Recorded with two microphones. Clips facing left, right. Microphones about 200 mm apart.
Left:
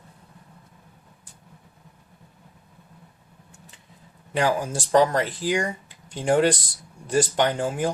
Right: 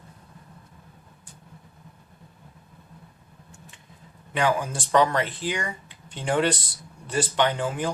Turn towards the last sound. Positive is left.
turn(degrees=40)  # may be behind; listen again after turning